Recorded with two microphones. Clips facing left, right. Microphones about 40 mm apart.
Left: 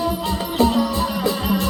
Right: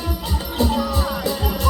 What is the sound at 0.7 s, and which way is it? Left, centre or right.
Music, left.